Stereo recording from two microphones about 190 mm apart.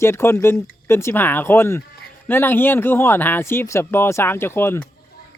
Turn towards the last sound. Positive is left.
turn(degrees=10)  # may be behind; listen again after turning